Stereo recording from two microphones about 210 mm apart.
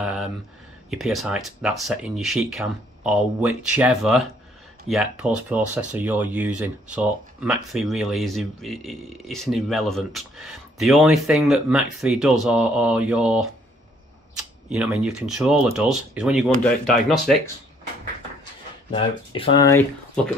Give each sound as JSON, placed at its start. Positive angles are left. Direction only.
{"t": 0.0, "sound": "a sound", "side_deg": 0}
{"t": 0.8, "sound": "speech", "side_deg": 0}
{"t": 14.7, "sound": "speech", "side_deg": -5}
{"t": 18.9, "sound": "speech", "side_deg": 25}